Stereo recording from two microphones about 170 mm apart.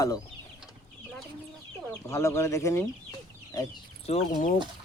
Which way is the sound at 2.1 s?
15° left (ahead or behind).